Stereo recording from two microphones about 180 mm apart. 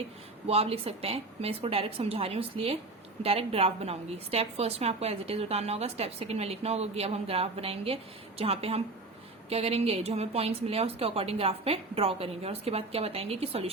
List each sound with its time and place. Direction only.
0.4 s a woman's voice: 35° right (ahead or behind)